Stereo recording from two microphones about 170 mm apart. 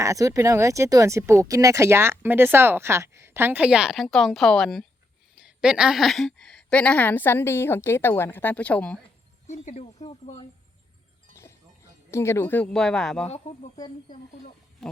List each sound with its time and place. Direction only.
0.0 s a woman's voice: 20° right (ahead or behind); by 9.0 s 5° left (ahead or behind)
9.5 s speech: 40° left (ahead or behind)
12.1 s a woman's voice: 15° left (ahead or behind)